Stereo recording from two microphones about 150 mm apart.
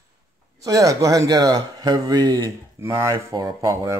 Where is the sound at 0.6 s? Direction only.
20° right (ahead or behind).